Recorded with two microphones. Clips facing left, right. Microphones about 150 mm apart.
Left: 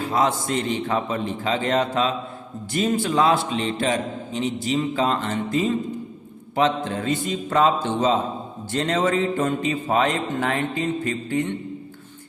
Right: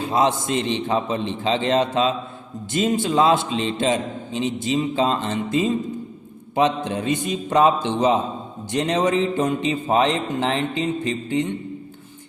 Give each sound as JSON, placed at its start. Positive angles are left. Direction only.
{"t": 0.0, "sound": "a man's voice", "side_deg": -20}